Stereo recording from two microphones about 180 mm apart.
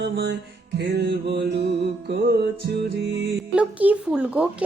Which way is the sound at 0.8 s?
65° right (ahead or behind).